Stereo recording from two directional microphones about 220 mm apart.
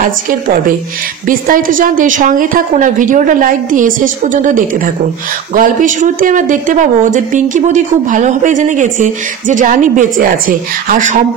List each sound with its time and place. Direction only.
1.2 s speech: 40° right (ahead or behind)